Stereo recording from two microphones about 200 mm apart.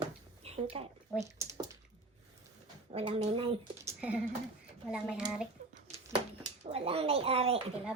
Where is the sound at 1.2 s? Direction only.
15° right (ahead or behind).